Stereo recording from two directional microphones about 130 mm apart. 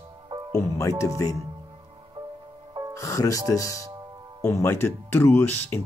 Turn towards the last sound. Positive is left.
turn(degrees=15)  # may be behind; listen again after turning